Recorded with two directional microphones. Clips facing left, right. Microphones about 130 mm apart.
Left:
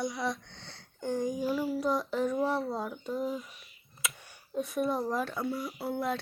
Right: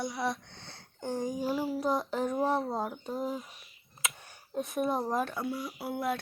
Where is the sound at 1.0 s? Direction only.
35° right (ahead or behind).